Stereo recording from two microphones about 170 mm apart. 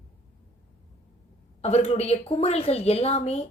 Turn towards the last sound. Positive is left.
turn(degrees=40)  # may be behind; listen again after turning